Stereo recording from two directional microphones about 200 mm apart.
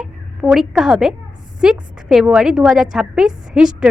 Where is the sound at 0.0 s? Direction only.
Centre (ahead or behind).